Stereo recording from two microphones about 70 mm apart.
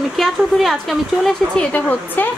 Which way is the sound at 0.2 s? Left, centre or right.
Centre.